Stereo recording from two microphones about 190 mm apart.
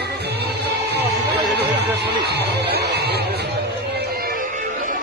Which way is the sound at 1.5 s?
60° right (ahead or behind).